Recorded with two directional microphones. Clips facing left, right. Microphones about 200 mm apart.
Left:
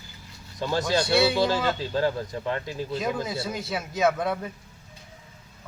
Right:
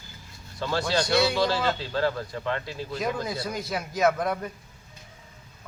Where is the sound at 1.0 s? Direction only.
5° left (ahead or behind).